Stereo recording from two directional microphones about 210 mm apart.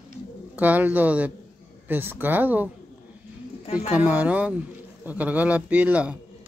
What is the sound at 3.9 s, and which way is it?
Speech, 5° right (ahead or behind).